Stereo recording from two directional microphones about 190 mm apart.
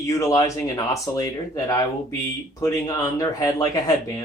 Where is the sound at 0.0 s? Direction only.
15° left (ahead or behind).